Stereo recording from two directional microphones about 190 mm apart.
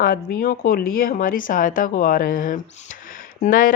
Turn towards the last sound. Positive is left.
turn(degrees=45)  # may be behind; listen again after turning